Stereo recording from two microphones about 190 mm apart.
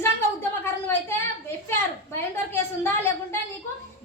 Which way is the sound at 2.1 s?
10° left (ahead or behind).